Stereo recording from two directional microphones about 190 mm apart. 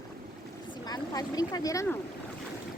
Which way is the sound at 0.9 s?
20° left (ahead or behind).